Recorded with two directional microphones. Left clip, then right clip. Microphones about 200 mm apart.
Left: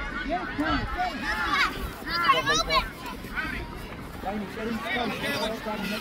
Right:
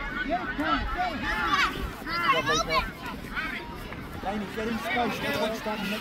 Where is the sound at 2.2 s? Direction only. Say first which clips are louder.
Left 2 dB; 35° left (ahead or behind).